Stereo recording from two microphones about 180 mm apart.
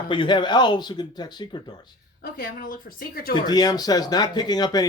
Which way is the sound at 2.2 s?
55° left (ahead or behind).